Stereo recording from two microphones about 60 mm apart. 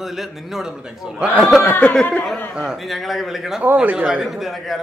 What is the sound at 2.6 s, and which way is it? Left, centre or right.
Speech, centre.